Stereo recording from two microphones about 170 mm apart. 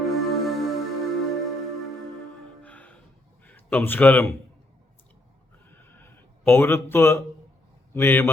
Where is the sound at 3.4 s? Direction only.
10° left (ahead or behind).